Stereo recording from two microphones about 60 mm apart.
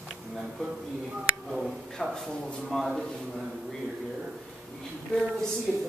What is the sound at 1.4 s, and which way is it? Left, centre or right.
Speech, centre.